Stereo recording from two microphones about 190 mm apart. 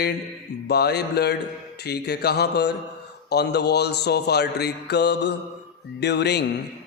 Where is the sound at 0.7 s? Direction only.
60° left (ahead or behind).